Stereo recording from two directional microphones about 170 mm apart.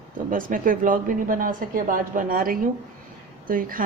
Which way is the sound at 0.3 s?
55° right (ahead or behind).